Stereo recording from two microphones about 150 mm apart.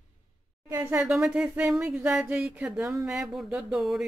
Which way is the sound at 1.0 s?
5° right (ahead or behind).